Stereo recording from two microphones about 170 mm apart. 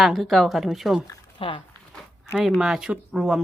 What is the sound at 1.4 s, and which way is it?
Speech, 30° left (ahead or behind).